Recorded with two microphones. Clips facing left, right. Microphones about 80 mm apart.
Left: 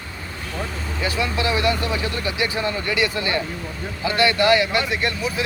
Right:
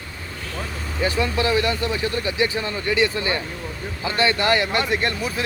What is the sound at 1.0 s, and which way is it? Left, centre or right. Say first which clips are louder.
Speech: right 2 dB; right.